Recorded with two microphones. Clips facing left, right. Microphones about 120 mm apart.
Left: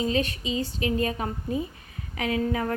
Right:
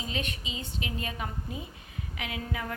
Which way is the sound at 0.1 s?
35° left (ahead or behind).